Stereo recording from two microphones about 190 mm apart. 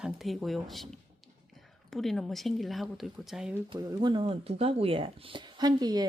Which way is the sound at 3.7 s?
25° right (ahead or behind).